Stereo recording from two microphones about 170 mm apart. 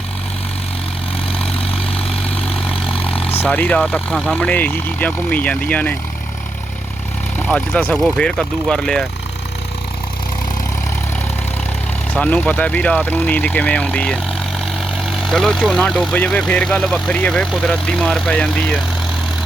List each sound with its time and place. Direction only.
3.1 s vehicle: 35° left (ahead or behind)
3.4 s speech: 10° left (ahead or behind)
7.3 s speech: 5° left (ahead or behind)
12.2 s speech: 10° left (ahead or behind)